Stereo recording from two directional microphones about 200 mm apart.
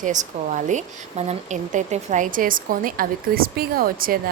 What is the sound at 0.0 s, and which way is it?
Speech, 40° right (ahead or behind).